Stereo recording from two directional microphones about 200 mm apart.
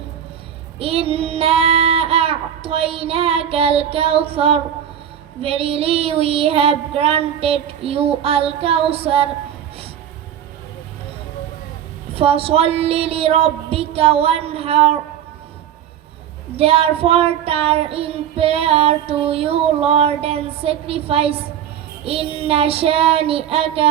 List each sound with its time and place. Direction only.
0.8 s child singing: 30° right (ahead or behind)
12.1 s child singing: 30° right (ahead or behind)
16.6 s child singing: 30° right (ahead or behind)